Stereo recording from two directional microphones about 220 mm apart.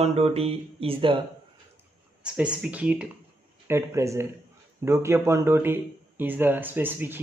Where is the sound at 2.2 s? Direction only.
5° right (ahead or behind).